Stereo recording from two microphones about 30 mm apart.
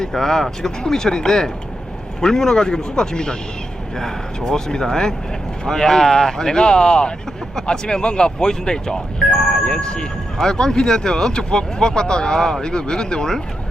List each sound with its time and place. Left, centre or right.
0.0 s speech: centre
4.4 s speech: left
9.6 s speech: left
10.3 s speech: left